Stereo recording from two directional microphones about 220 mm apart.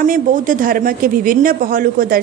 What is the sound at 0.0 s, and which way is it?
Speech, 35° right (ahead or behind).